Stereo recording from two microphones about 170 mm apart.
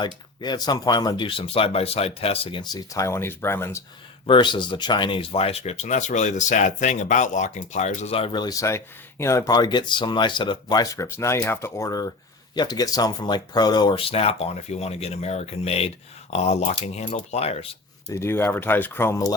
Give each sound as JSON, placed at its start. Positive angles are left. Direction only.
{"t": 0.0, "sound": "speech", "side_deg": 25}
{"t": 4.3, "sound": "speech", "side_deg": 25}
{"t": 18.1, "sound": "speech", "side_deg": 15}